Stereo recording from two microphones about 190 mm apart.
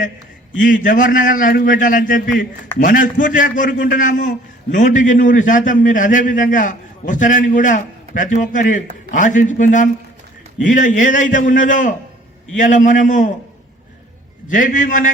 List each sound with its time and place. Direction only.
0.6 s a man's voice: 45° left (ahead or behind)
14.4 s a man's voice: 45° left (ahead or behind)